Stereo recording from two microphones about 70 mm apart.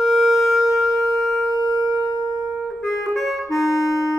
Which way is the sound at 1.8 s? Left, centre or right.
Centre.